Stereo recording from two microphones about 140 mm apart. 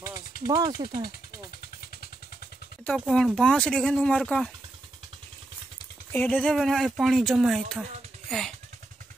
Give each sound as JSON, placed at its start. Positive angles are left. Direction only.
{"t": 0.5, "sound": "speech", "side_deg": -25}
{"t": 2.9, "sound": "speech", "side_deg": 5}
{"t": 6.1, "sound": "speech", "side_deg": 5}